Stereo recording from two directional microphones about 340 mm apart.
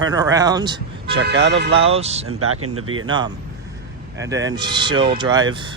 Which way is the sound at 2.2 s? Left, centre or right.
Right.